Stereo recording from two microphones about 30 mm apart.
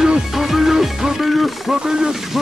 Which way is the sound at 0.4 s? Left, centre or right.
Centre.